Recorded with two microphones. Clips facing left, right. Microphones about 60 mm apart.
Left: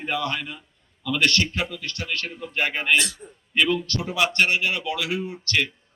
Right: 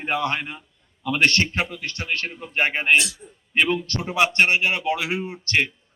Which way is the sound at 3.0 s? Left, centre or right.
Left.